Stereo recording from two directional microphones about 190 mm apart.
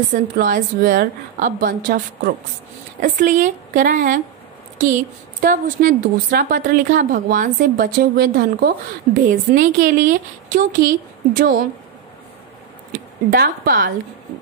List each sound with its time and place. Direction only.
0.1 s speech: 45° right (ahead or behind)
5.4 s speech: 45° right (ahead or behind)
13.3 s speech: 50° right (ahead or behind)